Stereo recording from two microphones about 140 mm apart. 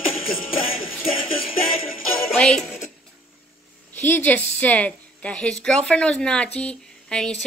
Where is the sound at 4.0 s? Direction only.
10° left (ahead or behind).